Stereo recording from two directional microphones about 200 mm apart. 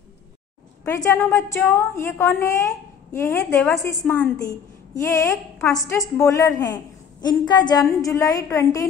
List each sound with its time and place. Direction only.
0.8 s a woman's voice: 15° left (ahead or behind)